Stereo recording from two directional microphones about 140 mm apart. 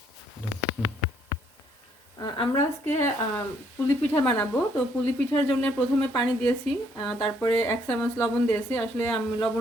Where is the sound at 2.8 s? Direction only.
15° left (ahead or behind).